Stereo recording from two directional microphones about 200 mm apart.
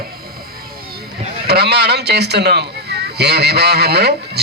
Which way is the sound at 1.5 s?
55° right (ahead or behind).